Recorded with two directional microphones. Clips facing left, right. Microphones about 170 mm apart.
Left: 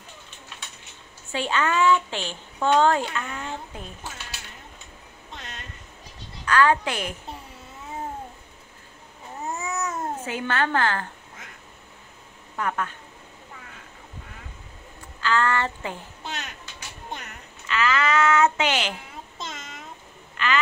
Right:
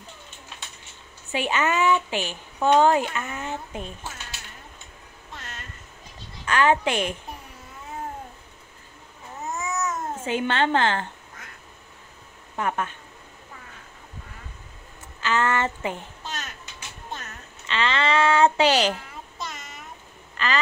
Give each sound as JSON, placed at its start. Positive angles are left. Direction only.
{"t": 1.3, "sound": "a woman's voice", "side_deg": -15}
{"t": 5.3, "sound": "a sound", "side_deg": 20}
{"t": 6.4, "sound": "a woman's voice", "side_deg": -20}
{"t": 9.6, "sound": "babbling", "side_deg": 30}
{"t": 10.2, "sound": "a woman's voice", "side_deg": -25}
{"t": 12.5, "sound": "a woman's voice", "side_deg": -25}
{"t": 15.1, "sound": "a woman's voice", "side_deg": -20}
{"t": 16.3, "sound": "a sound", "side_deg": 15}
{"t": 17.1, "sound": "music", "side_deg": 15}
{"t": 17.6, "sound": "child singing", "side_deg": -30}
{"t": 19.3, "sound": "a sound", "side_deg": 20}
{"t": 20.4, "sound": "telephone", "side_deg": -35}